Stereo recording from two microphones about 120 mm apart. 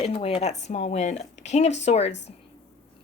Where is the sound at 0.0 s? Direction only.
60° left (ahead or behind).